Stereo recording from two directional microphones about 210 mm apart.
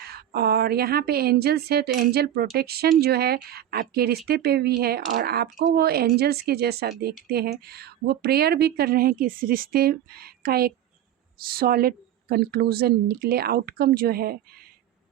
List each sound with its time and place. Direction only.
0.0 s a woman's voice: 50° right (ahead or behind)